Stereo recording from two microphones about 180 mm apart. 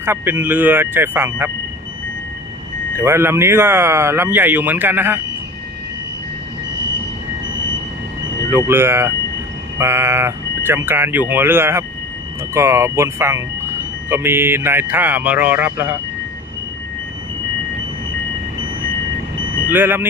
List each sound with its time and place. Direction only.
0.0 s speech: 10° right (ahead or behind)
3.0 s speech: 15° right (ahead or behind)
8.4 s speech: 15° right (ahead or behind)
19.7 s speech: 10° right (ahead or behind)